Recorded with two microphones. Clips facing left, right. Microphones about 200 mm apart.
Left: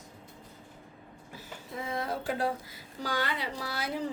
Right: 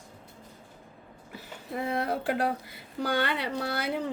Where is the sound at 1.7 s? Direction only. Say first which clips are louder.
Right 5 dB; 65° right (ahead or behind).